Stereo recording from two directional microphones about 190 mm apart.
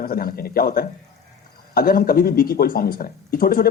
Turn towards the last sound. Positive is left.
turn(degrees=50)  # may be behind; listen again after turning